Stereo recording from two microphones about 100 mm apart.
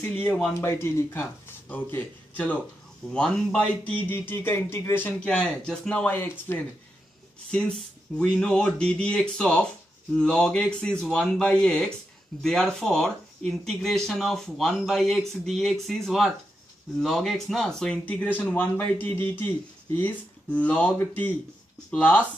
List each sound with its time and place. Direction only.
0.0 s speech: 20° left (ahead or behind)
7.5 s speech: 10° left (ahead or behind)
21.9 s speech: 10° left (ahead or behind)